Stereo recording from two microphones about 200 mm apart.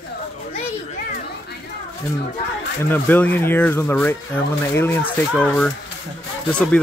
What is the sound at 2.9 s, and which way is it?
Speech, 10° left (ahead or behind).